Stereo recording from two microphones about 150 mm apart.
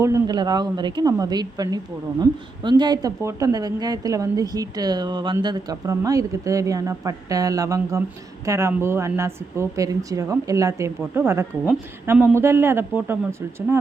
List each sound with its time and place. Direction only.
0.0 s a woman's voice: 25° right (ahead or behind)